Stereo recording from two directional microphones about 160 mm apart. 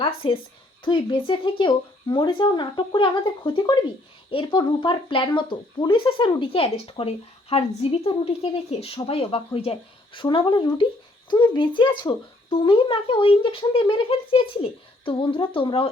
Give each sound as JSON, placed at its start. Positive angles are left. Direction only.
{"t": 0.0, "sound": "speech", "side_deg": 30}